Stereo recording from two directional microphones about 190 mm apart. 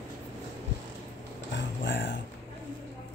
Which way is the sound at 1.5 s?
70° left (ahead or behind).